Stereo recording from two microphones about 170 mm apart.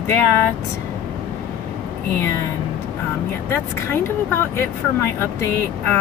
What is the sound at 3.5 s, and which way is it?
Speech, 15° left (ahead or behind).